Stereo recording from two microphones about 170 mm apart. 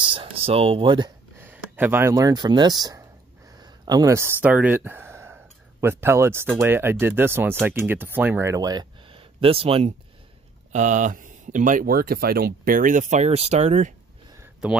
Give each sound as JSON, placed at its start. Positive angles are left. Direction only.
{"t": 0.0, "sound": "speech", "side_deg": -30}
{"t": 1.4, "sound": "speech", "side_deg": -10}
{"t": 10.7, "sound": "speech", "side_deg": -45}